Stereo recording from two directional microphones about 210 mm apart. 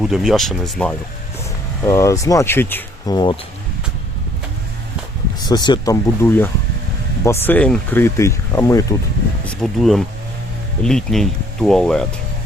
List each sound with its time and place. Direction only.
0.0 s speech: centre (ahead or behind)
5.5 s speech: 20° left (ahead or behind); by 12.0 s 5° left (ahead or behind)